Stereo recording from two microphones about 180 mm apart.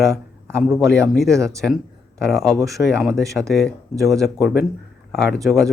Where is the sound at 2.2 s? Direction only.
Centre (ahead or behind).